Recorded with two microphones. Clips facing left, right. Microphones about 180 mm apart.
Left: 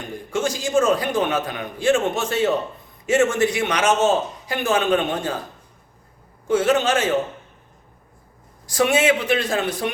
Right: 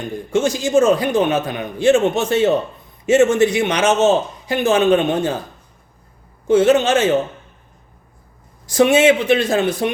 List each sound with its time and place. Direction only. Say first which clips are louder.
0.3 s a man's voice: right 6 dB; 20° right (ahead or behind)
6.5 s a man's voice: right 5 dB; 25° right (ahead or behind)
8.6 s a man's voice: right 6 dB; 25° right (ahead or behind)